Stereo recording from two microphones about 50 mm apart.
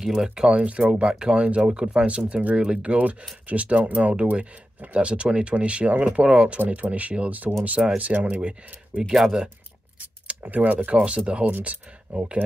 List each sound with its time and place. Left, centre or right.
0.0 s speech: centre; by 8.4 s right
8.4 s speech: centre
9.1 s speech: centre
10.4 s speech: right